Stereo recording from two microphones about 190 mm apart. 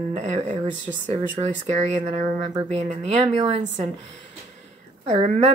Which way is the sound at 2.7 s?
35° right (ahead or behind).